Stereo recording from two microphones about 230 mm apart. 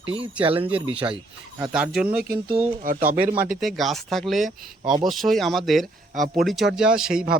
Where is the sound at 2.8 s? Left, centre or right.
Right.